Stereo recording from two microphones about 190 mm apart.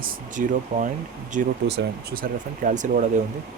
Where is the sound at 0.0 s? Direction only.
45° right (ahead or behind).